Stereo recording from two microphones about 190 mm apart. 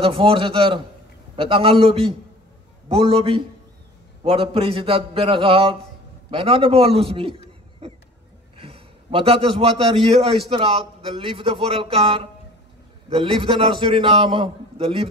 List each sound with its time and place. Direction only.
0.0 s a man's voice: 30° right (ahead or behind)
8.5 s a man's voice: 30° right (ahead or behind)